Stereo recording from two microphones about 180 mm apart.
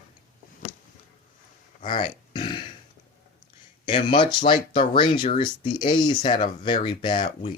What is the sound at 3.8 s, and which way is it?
Speech, 30° left (ahead or behind).